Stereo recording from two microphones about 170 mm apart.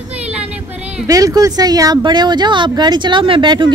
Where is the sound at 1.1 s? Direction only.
20° right (ahead or behind).